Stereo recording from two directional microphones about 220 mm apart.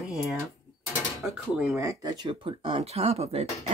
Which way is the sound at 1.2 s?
5° right (ahead or behind).